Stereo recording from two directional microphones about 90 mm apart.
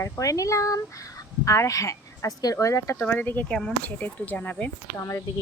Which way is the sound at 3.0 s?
15° left (ahead or behind).